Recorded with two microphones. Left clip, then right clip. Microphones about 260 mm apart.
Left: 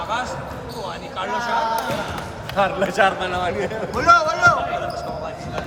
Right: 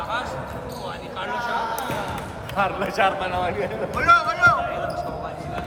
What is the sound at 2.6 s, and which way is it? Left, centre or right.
A man's voice, left.